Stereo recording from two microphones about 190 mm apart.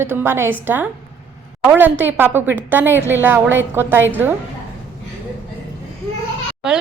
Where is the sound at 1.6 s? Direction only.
10° right (ahead or behind).